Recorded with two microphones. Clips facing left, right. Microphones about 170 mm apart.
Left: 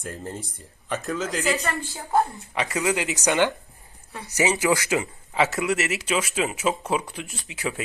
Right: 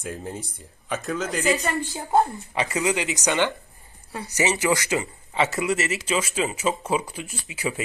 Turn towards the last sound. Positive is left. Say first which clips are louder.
# right 1 dB
turn(degrees=0)  # may be behind; listen again after turning